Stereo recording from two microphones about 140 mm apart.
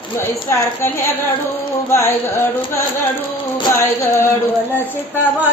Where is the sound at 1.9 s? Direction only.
20° left (ahead or behind).